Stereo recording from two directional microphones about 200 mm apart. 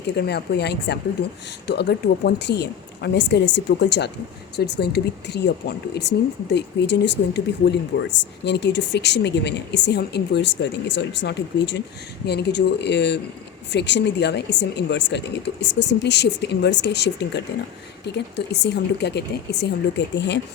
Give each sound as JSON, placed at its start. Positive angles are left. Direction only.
{"t": 0.2, "sound": "speech", "side_deg": 55}